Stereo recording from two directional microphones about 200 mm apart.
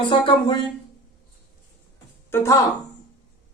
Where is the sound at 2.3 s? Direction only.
15° left (ahead or behind).